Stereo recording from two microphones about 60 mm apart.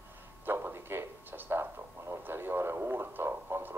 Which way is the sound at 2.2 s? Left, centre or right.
Right.